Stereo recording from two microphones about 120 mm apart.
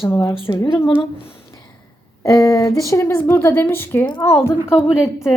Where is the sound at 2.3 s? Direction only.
25° left (ahead or behind).